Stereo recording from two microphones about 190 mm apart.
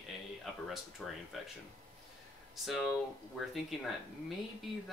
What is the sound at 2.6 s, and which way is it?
Speech, centre (ahead or behind).